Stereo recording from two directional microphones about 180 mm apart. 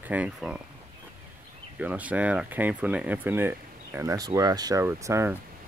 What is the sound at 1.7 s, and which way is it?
Speech, 10° right (ahead or behind).